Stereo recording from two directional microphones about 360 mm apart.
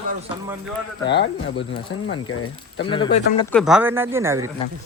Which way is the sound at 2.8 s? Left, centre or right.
Centre.